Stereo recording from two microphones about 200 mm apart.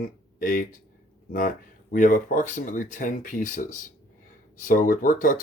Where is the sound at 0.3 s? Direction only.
45° left (ahead or behind).